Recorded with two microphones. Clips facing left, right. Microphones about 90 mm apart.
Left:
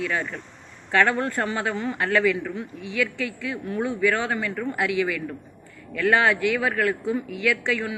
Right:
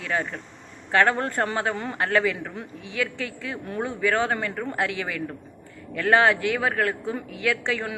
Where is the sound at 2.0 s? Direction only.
30° right (ahead or behind).